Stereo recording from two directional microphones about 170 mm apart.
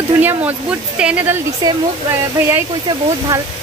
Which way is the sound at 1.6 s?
25° right (ahead or behind).